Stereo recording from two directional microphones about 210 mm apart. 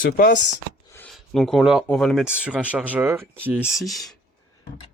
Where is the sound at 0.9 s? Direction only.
10° left (ahead or behind).